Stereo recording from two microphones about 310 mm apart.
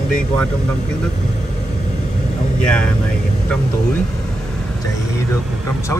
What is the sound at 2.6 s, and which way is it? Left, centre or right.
Speech, centre.